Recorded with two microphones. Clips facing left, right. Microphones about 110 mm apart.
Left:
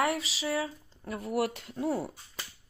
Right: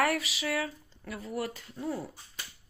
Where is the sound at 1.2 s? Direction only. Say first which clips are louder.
Left 6 dB; 70° left (ahead or behind).